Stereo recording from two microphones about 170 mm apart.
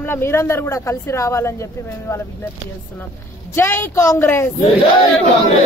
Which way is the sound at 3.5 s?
15° left (ahead or behind).